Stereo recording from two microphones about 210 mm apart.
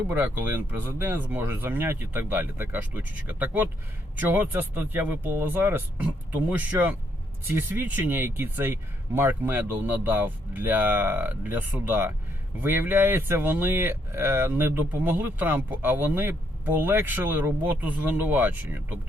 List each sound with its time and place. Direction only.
0.1 s speech: 10° right (ahead or behind)